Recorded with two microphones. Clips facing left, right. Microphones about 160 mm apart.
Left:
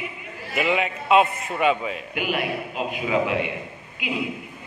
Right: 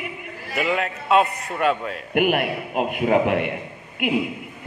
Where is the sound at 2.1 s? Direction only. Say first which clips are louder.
Right 7 dB; 60° right (ahead or behind).